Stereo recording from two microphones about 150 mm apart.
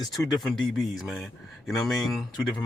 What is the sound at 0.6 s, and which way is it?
Speech, centre (ahead or behind).